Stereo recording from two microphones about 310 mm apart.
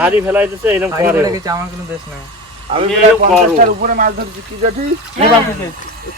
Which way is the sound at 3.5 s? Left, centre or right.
Right.